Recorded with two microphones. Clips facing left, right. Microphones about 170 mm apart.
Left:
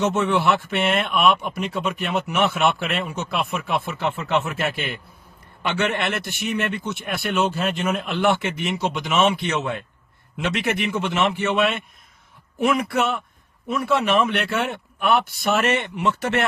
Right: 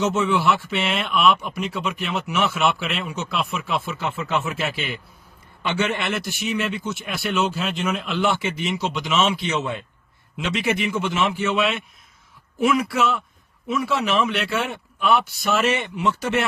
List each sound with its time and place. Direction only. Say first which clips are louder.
0.2 s speech: even; 60° left (ahead or behind)